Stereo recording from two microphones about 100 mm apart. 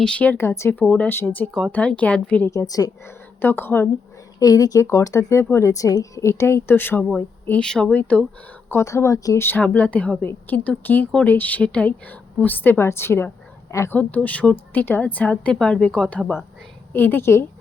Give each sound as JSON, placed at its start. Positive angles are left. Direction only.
{"t": 0.0, "sound": "a woman's voice", "side_deg": 10}
{"t": 0.8, "sound": "a woman's voice", "side_deg": 15}
{"t": 2.5, "sound": "speech", "side_deg": 35}
{"t": 3.4, "sound": "a woman's voice", "side_deg": 20}
{"t": 4.4, "sound": "speech", "side_deg": 40}
{"t": 7.6, "sound": "a woman's voice", "side_deg": 10}
{"t": 8.7, "sound": "speech", "side_deg": 30}
{"t": 9.5, "sound": "a woman's voice", "side_deg": 15}
{"t": 13.9, "sound": "a woman's voice", "side_deg": 15}